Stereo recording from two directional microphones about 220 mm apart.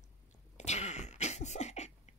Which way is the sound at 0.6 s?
30° left (ahead or behind).